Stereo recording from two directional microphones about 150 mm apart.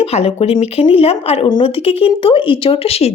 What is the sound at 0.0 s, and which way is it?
A woman's voice, 45° left (ahead or behind).